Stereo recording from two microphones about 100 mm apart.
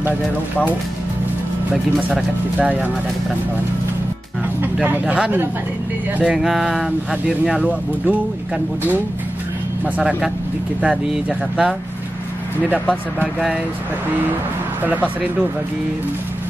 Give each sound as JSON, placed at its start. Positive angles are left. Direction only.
{"t": 4.8, "sound": "speech", "side_deg": -15}
{"t": 9.9, "sound": "speech", "side_deg": -5}
{"t": 14.8, "sound": "speech", "side_deg": -15}